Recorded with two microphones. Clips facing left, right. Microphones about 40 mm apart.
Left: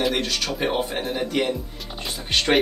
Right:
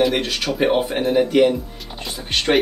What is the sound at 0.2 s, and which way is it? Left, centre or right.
Speech, centre.